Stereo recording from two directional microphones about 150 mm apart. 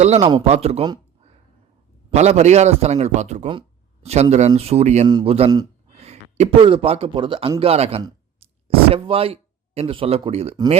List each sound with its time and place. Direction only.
0.0 s a man's voice: 45° right (ahead or behind)
2.0 s a man's voice: 45° right (ahead or behind)
5.0 s a man's voice: 30° right (ahead or behind)
5.9 s a sound: 45° right (ahead or behind)
6.6 s speech: 35° right (ahead or behind)